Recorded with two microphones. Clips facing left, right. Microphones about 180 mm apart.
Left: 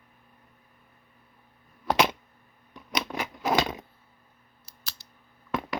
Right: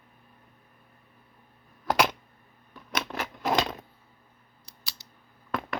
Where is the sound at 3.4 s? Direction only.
Centre (ahead or behind).